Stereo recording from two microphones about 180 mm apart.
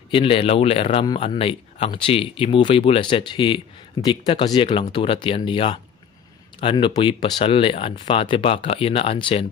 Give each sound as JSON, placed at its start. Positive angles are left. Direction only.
{"t": 0.1, "sound": "speech", "side_deg": 30}